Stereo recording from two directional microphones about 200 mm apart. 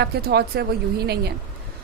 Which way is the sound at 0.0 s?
50° right (ahead or behind).